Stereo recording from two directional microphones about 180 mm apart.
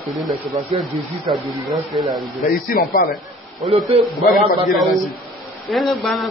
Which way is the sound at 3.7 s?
35° right (ahead or behind).